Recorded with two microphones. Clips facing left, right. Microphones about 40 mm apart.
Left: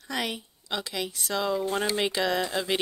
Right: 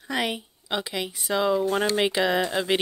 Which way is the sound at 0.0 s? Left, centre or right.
Centre.